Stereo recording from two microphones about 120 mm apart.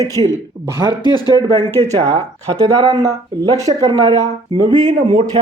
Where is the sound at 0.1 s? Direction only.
25° left (ahead or behind).